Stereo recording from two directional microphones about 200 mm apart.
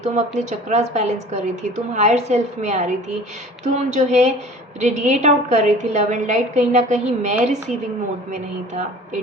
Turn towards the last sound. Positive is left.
turn(degrees=-35)  # may be behind; listen again after turning